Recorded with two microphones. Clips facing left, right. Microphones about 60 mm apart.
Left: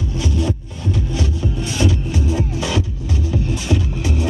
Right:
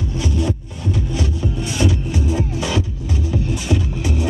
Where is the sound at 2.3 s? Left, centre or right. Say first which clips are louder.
Even; right.